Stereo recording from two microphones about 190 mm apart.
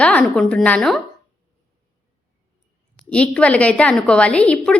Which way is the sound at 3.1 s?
5° left (ahead or behind).